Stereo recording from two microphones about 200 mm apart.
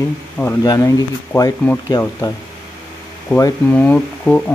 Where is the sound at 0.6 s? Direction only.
20° left (ahead or behind).